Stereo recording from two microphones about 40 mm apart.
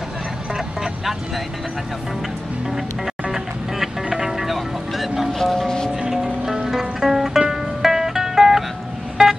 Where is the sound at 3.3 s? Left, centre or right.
Centre.